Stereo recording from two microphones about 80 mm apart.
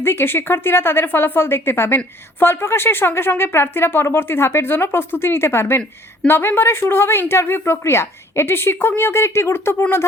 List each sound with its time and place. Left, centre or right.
0.0 s a woman's voice: left